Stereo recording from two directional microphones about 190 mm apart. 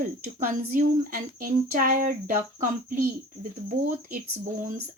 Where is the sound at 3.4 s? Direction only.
45° right (ahead or behind).